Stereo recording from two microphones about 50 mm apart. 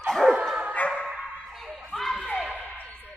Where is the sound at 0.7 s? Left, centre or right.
Left.